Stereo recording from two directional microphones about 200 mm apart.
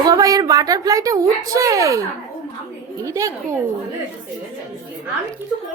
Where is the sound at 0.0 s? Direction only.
20° right (ahead or behind).